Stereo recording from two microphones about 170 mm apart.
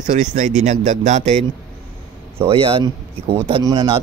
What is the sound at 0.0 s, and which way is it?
Speech, 45° right (ahead or behind).